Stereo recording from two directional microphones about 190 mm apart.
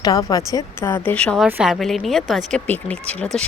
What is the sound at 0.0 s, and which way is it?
Speech, 20° left (ahead or behind).